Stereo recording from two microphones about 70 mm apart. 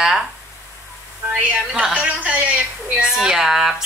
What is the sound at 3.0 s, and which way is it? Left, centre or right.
Speech, centre.